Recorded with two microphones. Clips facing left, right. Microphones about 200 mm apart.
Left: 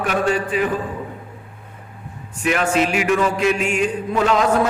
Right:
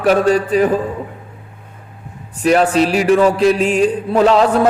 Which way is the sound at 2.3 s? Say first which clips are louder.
Right 6 dB; 35° right (ahead or behind).